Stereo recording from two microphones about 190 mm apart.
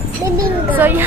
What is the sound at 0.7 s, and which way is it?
Speech, 10° right (ahead or behind).